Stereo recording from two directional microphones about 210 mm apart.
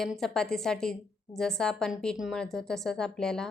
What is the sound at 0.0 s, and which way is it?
A woman's voice, centre (ahead or behind).